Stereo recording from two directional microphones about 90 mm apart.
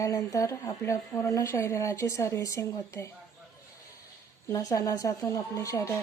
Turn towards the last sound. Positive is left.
turn(degrees=35)  # may be behind; listen again after turning